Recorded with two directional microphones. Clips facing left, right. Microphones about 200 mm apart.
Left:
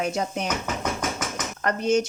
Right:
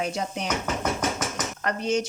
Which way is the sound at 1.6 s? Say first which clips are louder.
Left 4 dB; 45° left (ahead or behind).